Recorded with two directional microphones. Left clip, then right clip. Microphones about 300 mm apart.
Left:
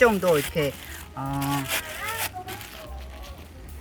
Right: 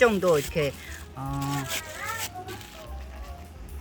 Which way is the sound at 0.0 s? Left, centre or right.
Centre.